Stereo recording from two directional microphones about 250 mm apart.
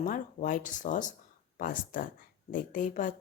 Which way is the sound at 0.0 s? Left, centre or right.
Left.